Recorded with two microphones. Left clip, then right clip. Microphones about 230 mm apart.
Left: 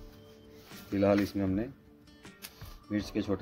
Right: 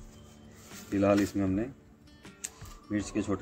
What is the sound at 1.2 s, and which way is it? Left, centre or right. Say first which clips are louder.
Speech: right 2 dB; left.